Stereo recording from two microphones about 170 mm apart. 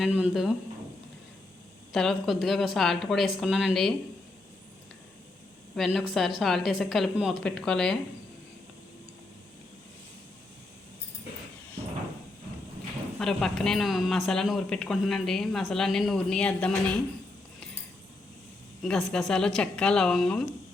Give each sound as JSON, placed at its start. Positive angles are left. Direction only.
{"t": 0.0, "sound": "speech", "side_deg": -5}
{"t": 1.9, "sound": "speech", "side_deg": 0}
{"t": 5.7, "sound": "speech", "side_deg": 0}
{"t": 13.1, "sound": "speech", "side_deg": 5}
{"t": 18.8, "sound": "speech", "side_deg": 5}